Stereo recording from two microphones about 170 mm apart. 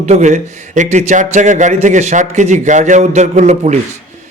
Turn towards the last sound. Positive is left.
turn(degrees=-40)  # may be behind; listen again after turning